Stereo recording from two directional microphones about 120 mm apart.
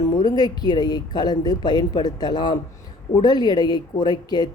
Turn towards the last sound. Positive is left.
turn(degrees=35)  # may be behind; listen again after turning